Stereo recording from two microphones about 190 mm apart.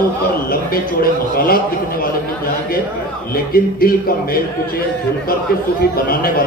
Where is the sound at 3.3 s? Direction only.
50° left (ahead or behind).